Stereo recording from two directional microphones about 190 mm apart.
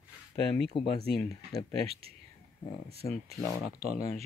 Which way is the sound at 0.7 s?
30° left (ahead or behind).